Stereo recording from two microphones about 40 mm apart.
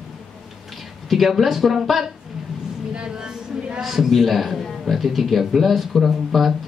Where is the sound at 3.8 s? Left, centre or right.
Centre.